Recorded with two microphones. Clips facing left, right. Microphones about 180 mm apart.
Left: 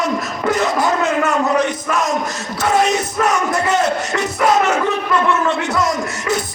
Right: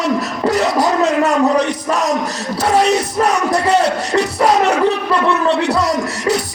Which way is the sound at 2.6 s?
35° right (ahead or behind).